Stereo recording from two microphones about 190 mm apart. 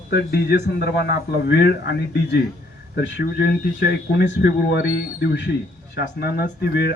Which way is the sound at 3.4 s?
60° left (ahead or behind).